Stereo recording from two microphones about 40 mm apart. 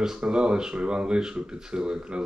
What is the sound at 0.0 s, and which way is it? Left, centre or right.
Speech, centre.